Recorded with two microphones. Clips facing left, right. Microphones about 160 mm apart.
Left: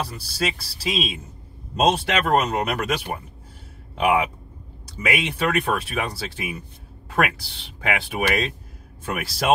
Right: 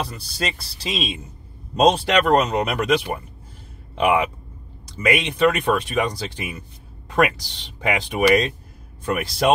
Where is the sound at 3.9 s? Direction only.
5° left (ahead or behind).